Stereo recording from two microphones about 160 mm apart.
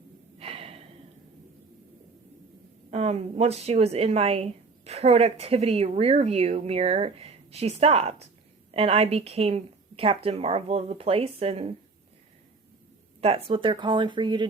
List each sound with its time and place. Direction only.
0.3 s gasp: 40° right (ahead or behind)
2.9 s a woman's voice: 40° right (ahead or behind)
13.2 s speech: 35° right (ahead or behind)